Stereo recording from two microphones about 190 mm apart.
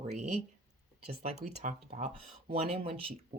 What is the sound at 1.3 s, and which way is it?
Speech, 35° right (ahead or behind).